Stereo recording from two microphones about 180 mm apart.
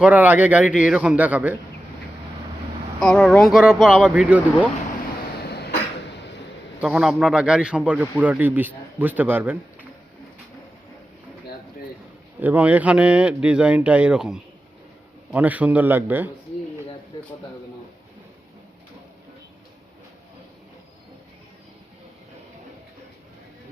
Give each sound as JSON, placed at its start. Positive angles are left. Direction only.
{"t": 0.0, "sound": "a man's voice", "side_deg": -10}
{"t": 3.0, "sound": "speech", "side_deg": 5}
{"t": 5.4, "sound": "cough", "side_deg": 65}
{"t": 6.8, "sound": "a man's voice", "side_deg": -5}
{"t": 12.4, "sound": "a man's voice", "side_deg": -10}